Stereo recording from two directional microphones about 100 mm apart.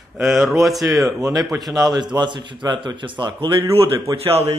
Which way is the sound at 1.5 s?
45° right (ahead or behind).